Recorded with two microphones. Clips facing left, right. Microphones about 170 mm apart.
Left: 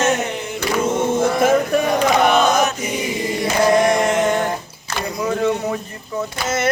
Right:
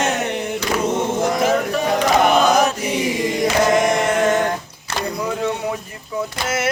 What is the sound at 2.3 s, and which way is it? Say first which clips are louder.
Mantra: right 1 dB; 35° right (ahead or behind).